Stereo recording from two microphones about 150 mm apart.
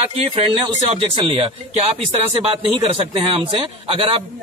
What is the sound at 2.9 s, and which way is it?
A man's voice, 40° right (ahead or behind).